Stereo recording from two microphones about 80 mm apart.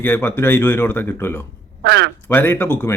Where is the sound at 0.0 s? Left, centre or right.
Left.